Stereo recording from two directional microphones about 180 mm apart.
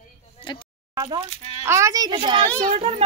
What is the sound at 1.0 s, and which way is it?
A woman's voice, 25° right (ahead or behind).